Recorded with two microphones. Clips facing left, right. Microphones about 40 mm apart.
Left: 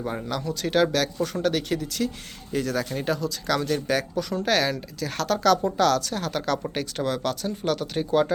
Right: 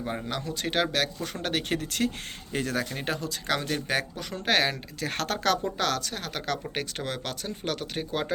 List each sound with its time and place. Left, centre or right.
0.3 s speech: right
1.8 s speech: right
2.5 s speech: right
5.0 s speech: right
5.6 s speech: right